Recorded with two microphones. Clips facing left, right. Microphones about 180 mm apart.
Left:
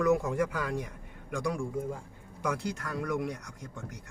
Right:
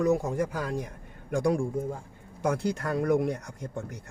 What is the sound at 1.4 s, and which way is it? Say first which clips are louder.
Speech: right 7 dB; 45° right (ahead or behind).